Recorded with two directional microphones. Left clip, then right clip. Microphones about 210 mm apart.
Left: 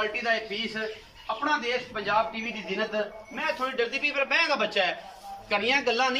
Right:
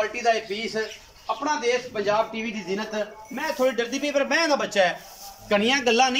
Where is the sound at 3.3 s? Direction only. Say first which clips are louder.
Right 6 dB; 30° right (ahead or behind).